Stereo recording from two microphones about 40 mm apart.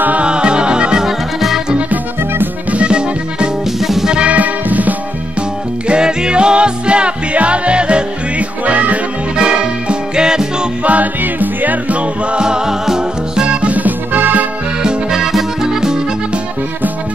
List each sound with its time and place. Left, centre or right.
0.2 s music: right
1.0 s music: centre
2.7 s music: right
3.8 s music: centre
4.1 s music: right
4.4 s music: right
5.9 s music: right
9.4 s music: right
10.8 s music: right
12.4 s music: centre
13.5 s music: right
13.7 s music: right
14.8 s music: centre
15.1 s music: centre